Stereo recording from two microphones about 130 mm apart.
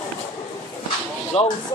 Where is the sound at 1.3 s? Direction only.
50° left (ahead or behind).